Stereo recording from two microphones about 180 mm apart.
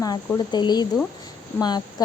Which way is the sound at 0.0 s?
20° left (ahead or behind).